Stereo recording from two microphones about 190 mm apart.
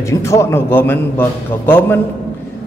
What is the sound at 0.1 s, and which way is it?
A man's voice, 15° left (ahead or behind).